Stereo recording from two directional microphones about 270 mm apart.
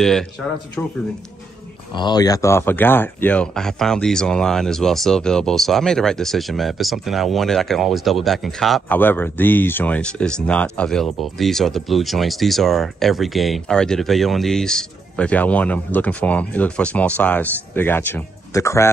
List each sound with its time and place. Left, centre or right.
0.0 s speech: centre
2.0 s speech: centre